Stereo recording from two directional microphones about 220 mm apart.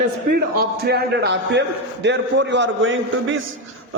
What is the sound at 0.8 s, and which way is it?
A man's voice, 45° right (ahead or behind).